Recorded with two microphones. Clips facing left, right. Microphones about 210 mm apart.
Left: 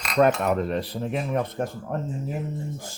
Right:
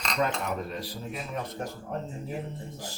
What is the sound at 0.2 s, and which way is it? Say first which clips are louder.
Speech: left 10 dB; 65° left (ahead or behind).